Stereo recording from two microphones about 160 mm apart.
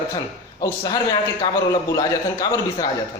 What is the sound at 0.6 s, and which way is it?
A man's voice, 25° left (ahead or behind).